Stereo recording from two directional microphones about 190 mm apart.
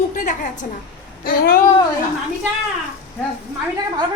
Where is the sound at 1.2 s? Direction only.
50° left (ahead or behind).